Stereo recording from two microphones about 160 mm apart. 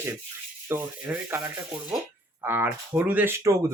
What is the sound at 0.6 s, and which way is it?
Speech, 15° right (ahead or behind).